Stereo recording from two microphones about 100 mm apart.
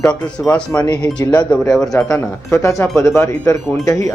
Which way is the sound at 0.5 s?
10° left (ahead or behind).